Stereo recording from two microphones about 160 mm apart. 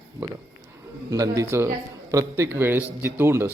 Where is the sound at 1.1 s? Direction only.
20° right (ahead or behind).